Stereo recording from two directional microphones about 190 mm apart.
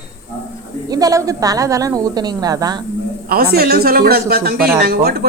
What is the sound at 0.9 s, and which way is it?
Speech, 20° right (ahead or behind).